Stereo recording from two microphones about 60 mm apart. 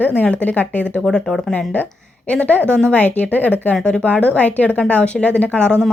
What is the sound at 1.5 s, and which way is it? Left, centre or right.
A woman's voice, centre.